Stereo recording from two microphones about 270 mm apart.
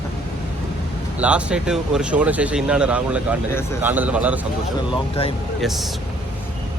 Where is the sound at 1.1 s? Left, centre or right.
Centre.